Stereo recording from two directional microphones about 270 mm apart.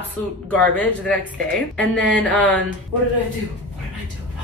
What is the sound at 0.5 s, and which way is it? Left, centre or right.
A woman's voice, centre.